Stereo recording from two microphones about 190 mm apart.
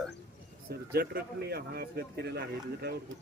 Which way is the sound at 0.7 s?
55° right (ahead or behind).